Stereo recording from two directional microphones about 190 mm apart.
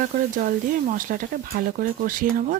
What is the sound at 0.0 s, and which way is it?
Speech, 45° right (ahead or behind).